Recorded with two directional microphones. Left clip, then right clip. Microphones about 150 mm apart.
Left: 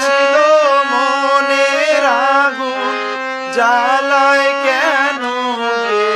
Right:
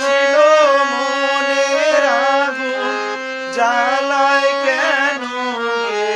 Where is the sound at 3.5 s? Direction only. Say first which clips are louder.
Left 3 dB; 55° left (ahead or behind).